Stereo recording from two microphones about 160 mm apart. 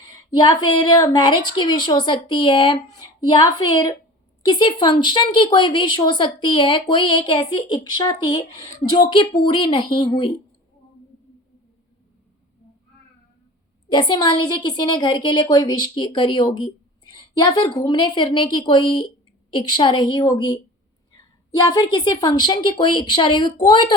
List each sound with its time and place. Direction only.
0.0 s a woman's voice: 25° left (ahead or behind)
4.4 s a woman's voice: 30° left (ahead or behind)
13.9 s a woman's voice: 25° left (ahead or behind)